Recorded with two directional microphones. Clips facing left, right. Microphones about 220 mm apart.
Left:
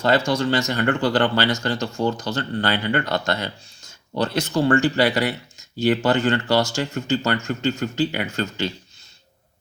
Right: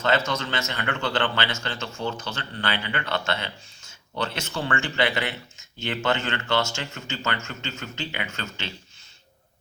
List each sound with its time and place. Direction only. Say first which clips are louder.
0.3 s speech: left 8 dB; 35° left (ahead or behind)